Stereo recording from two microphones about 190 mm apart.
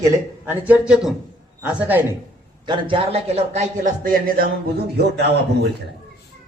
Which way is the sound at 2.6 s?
25° right (ahead or behind).